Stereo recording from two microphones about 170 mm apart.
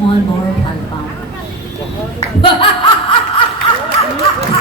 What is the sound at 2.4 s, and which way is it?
Snicker, 30° left (ahead or behind).